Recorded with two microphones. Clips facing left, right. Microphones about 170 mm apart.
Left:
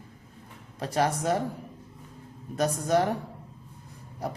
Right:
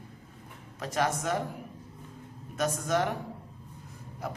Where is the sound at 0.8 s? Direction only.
35° left (ahead or behind).